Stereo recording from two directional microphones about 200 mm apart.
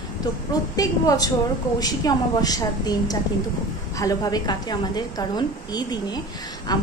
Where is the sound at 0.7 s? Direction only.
20° left (ahead or behind).